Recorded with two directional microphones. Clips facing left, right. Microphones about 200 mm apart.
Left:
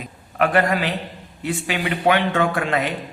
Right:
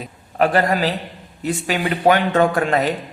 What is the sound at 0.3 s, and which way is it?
Speech, 35° right (ahead or behind).